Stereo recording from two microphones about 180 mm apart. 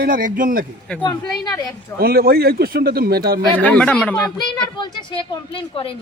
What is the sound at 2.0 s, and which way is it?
Speech, 60° right (ahead or behind).